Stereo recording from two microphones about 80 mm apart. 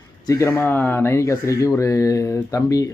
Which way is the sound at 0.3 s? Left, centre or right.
Left.